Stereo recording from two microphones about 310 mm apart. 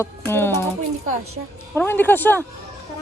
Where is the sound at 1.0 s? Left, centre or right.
Right.